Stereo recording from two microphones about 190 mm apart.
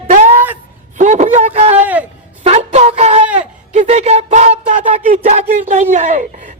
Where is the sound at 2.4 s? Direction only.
35° right (ahead or behind).